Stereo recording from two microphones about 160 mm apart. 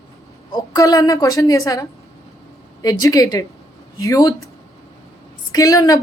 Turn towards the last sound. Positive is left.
turn(degrees=20)  # may be behind; listen again after turning